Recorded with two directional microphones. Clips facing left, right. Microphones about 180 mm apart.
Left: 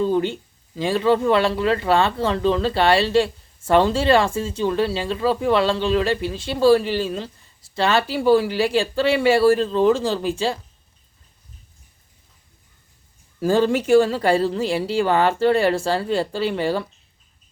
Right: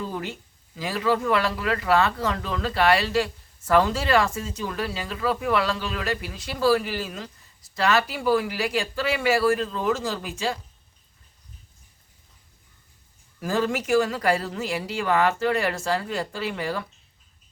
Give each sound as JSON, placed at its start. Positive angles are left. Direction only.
{"t": 0.0, "sound": "speech", "side_deg": 30}
{"t": 13.4, "sound": "speech", "side_deg": 30}